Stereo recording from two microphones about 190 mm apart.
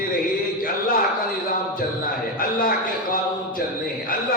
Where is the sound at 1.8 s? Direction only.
50° left (ahead or behind).